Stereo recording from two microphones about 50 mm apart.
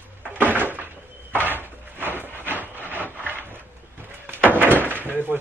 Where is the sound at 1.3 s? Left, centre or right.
Right.